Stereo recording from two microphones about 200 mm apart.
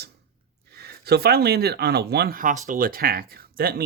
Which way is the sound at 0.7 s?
50° right (ahead or behind).